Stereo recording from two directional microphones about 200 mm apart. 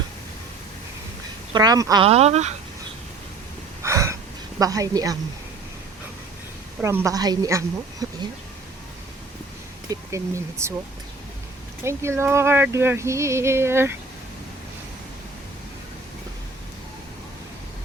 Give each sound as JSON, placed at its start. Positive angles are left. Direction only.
{"t": 1.5, "sound": "speech", "side_deg": -20}
{"t": 2.0, "sound": "speech", "side_deg": -30}
{"t": 3.8, "sound": "gasp", "side_deg": -15}
{"t": 4.6, "sound": "speech", "side_deg": -15}
{"t": 6.8, "sound": "speech", "side_deg": -15}
{"t": 9.9, "sound": "speech", "side_deg": -15}
{"t": 11.8, "sound": "speech", "side_deg": -15}